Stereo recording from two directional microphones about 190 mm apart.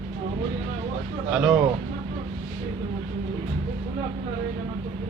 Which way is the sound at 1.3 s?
5° right (ahead or behind).